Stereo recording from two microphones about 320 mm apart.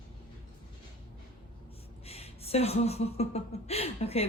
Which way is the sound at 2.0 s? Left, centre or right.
Centre.